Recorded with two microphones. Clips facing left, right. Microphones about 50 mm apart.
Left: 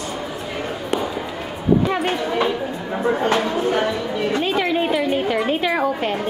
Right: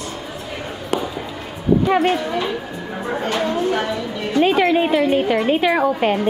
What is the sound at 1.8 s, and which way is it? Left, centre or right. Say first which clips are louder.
Speech: right 4 dB; centre.